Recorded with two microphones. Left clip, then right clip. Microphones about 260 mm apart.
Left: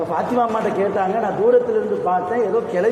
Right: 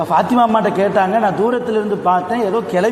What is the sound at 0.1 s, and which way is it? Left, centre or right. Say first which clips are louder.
A man's voice: right 8 dB; right.